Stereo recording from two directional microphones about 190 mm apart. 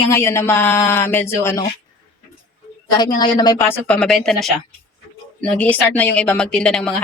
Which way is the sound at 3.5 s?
10° left (ahead or behind).